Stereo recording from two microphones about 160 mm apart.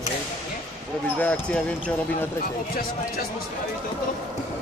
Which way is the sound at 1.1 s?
10° left (ahead or behind).